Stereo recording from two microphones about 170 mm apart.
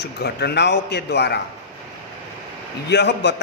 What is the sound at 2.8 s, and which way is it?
Speech, 85° left.